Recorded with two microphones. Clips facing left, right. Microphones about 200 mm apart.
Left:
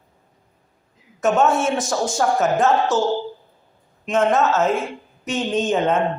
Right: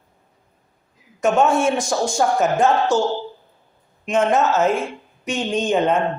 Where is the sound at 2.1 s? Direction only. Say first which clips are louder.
Even; 15° right (ahead or behind).